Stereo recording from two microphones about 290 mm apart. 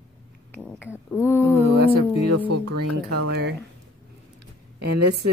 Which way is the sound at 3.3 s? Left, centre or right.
Right.